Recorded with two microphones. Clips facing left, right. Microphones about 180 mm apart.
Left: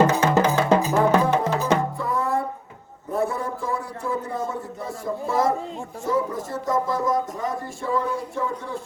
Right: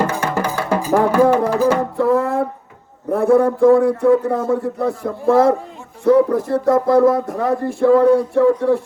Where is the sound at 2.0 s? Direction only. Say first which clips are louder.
Right 9 dB; 65° right (ahead or behind).